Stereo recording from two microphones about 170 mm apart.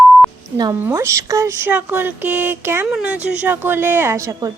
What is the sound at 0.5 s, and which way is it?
Speech, 20° right (ahead or behind).